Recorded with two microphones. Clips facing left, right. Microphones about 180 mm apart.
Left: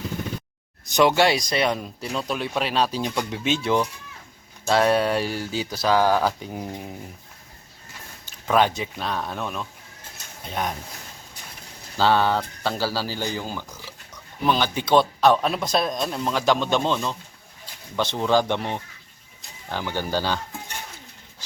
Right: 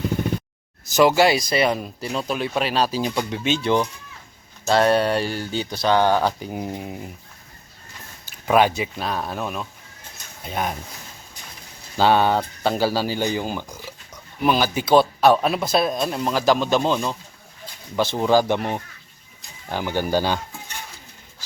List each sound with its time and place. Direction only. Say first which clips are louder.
0.9 s speech: right 2 dB; 5° right (ahead or behind)
8.2 s speech: right 3 dB; 10° right (ahead or behind)
11.9 s speech: right 3 dB; 15° right (ahead or behind)